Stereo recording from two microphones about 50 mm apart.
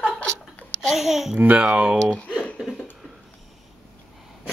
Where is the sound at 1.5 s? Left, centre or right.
Right.